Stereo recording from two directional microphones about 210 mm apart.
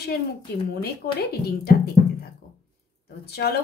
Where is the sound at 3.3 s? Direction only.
50° left (ahead or behind).